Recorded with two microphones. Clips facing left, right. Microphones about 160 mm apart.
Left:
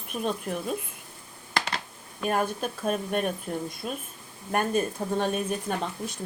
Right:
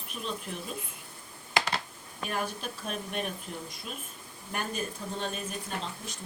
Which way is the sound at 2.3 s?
45° left (ahead or behind).